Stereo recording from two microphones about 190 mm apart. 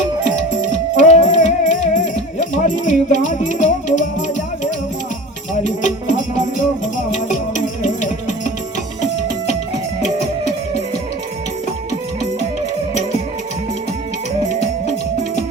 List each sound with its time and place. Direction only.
0.9 s music: 40° left (ahead or behind)
5.6 s music: 40° left (ahead or behind)